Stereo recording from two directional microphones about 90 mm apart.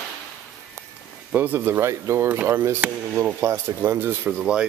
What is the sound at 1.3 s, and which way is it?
Speech, 20° right (ahead or behind).